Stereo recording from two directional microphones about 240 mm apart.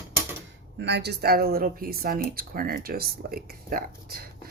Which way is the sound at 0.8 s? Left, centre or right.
Right.